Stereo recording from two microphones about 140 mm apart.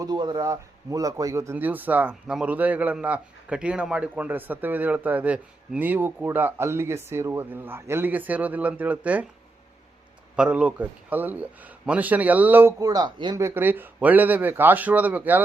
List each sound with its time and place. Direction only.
0.0 s speech: 30° right (ahead or behind); by 9.2 s 10° right (ahead or behind)
10.3 s speech: 5° right (ahead or behind)
12.8 s speech: 30° right (ahead or behind)
13.4 s speech: 15° right (ahead or behind)